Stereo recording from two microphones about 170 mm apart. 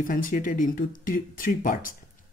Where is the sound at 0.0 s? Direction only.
55° left (ahead or behind).